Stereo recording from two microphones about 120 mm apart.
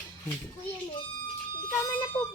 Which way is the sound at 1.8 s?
25° left (ahead or behind).